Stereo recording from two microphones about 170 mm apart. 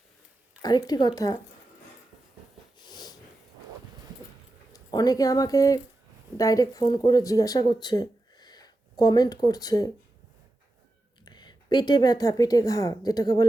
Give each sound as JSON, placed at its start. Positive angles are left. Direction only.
{"t": 0.6, "sound": "speech", "side_deg": 25}
{"t": 2.7, "sound": "snort", "side_deg": 25}
{"t": 4.7, "sound": "speech", "side_deg": 25}
{"t": 11.3, "sound": "a woman's voice", "side_deg": 25}